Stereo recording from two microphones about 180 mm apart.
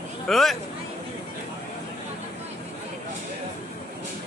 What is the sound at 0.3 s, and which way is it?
Speech, centre (ahead or behind).